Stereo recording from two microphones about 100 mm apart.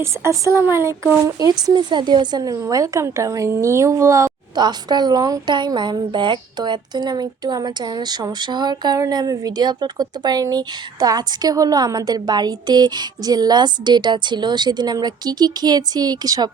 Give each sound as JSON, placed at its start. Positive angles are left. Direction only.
{"t": 0.0, "sound": "speech", "side_deg": -30}
{"t": 1.4, "sound": "speech", "side_deg": -40}
{"t": 4.5, "sound": "speech", "side_deg": -45}